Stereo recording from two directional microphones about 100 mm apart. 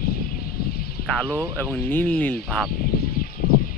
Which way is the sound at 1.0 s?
15° left (ahead or behind).